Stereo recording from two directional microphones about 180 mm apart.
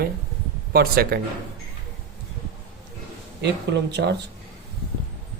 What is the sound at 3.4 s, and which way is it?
Speech, 70° right (ahead or behind).